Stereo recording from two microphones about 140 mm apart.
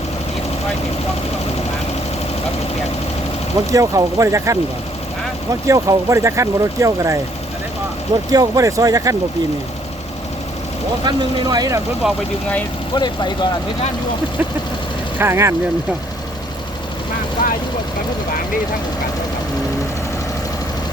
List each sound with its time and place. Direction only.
3.7 s speech: 25° right (ahead or behind)
5.6 s speech: 25° right (ahead or behind)
8.3 s speech: 25° right (ahead or behind)
11.0 s speech: 30° right (ahead or behind)
12.0 s speech: 5° right (ahead or behind)
12.9 s speech: 35° left (ahead or behind)
15.2 s speech: 20° right (ahead or behind)
17.4 s speech: 80° left